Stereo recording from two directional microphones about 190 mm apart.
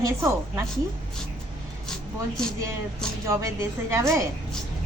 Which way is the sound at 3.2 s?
15° right (ahead or behind).